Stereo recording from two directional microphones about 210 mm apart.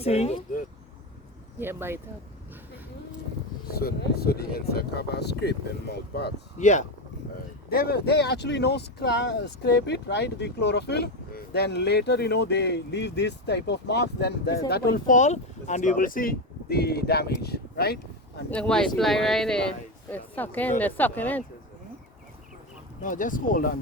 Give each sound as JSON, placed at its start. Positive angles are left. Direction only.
{"t": 0.0, "sound": "speech", "side_deg": 30}
{"t": 1.5, "sound": "speech", "side_deg": -10}
{"t": 3.7, "sound": "speech", "side_deg": 45}
{"t": 6.6, "sound": "speech", "side_deg": 35}
{"t": 7.7, "sound": "speech", "side_deg": 45}
{"t": 18.5, "sound": "speech", "side_deg": 5}
{"t": 23.0, "sound": "speech", "side_deg": 40}